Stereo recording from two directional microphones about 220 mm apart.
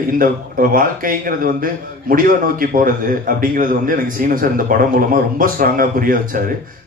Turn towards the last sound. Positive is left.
turn(degrees=-40)  # may be behind; listen again after turning